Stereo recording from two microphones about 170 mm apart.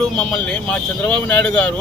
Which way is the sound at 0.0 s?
5° left (ahead or behind).